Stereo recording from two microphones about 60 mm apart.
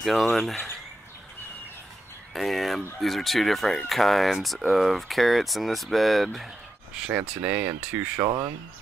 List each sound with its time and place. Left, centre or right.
0.0 s speech: centre
2.3 s speech: centre
7.1 s speech: right